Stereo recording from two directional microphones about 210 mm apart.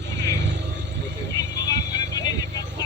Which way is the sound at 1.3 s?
15° left (ahead or behind).